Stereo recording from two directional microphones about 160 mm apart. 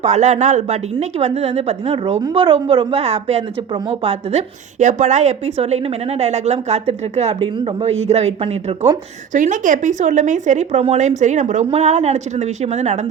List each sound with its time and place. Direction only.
0.0 s a woman's voice: 45° right (ahead or behind)
9.3 s a woman's voice: 50° right (ahead or behind)